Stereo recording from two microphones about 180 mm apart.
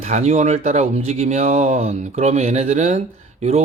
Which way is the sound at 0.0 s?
40° right (ahead or behind).